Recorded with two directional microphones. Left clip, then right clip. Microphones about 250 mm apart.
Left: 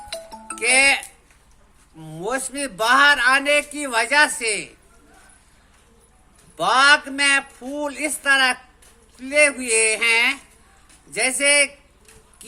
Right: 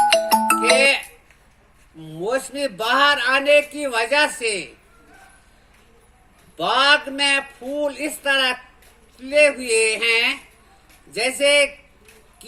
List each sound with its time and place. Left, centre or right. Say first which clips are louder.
0.1 s music: right 18 dB; right
0.8 s music: even; left
2.0 s a man's voice: right 3 dB; left
6.6 s a man's voice: left 1 dB; left